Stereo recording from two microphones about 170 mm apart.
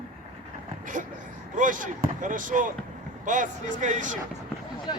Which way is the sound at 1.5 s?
50° right (ahead or behind).